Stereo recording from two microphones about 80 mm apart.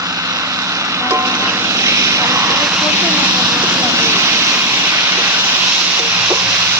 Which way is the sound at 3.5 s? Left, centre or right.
Right.